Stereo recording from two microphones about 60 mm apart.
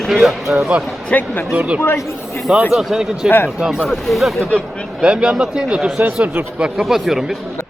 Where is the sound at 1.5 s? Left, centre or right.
Centre.